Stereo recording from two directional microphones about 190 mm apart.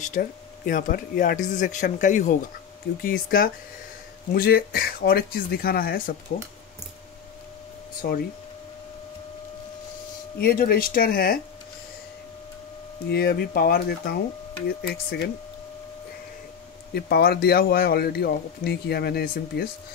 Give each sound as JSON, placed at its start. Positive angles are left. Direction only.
{"t": 0.0, "sound": "speech", "side_deg": 45}
{"t": 8.0, "sound": "speech", "side_deg": 50}
{"t": 10.4, "sound": "speech", "side_deg": 50}
{"t": 13.1, "sound": "speech", "side_deg": 55}
{"t": 16.9, "sound": "speech", "side_deg": 55}